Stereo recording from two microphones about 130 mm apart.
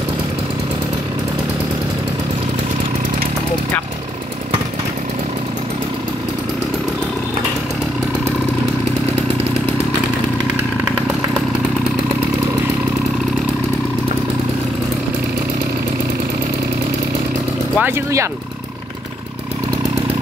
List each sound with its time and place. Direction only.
17.7 s speech: 15° right (ahead or behind)